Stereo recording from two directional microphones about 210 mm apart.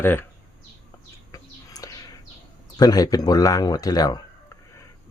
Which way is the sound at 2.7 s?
20° left (ahead or behind).